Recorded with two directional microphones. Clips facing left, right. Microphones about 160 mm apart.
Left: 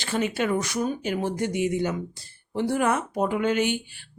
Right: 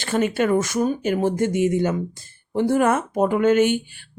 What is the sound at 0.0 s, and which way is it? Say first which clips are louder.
Speech: right 5 dB; 50° right (ahead or behind).